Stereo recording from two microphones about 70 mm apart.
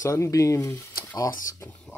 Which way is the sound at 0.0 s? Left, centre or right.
Left.